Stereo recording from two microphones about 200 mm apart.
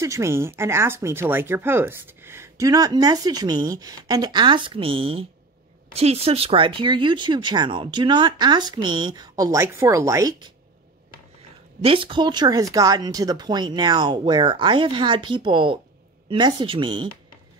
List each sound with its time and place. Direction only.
0.0 s speech: 15° right (ahead or behind)
11.8 s speech: 25° right (ahead or behind)